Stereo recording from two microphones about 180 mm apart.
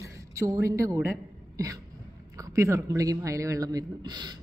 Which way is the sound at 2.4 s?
15° right (ahead or behind).